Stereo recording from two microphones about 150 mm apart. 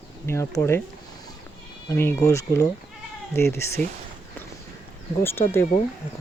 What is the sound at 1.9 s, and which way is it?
Speech, 15° left (ahead or behind).